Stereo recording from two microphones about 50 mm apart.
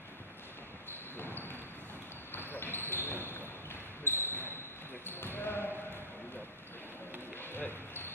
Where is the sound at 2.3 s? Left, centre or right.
Left.